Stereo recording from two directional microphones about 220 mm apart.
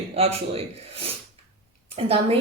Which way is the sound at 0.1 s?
30° right (ahead or behind).